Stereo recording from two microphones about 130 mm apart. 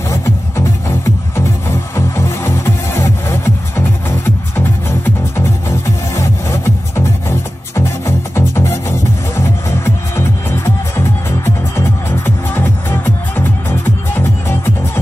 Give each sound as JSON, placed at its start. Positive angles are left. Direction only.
{"t": 0.1, "sound": "music", "side_deg": 20}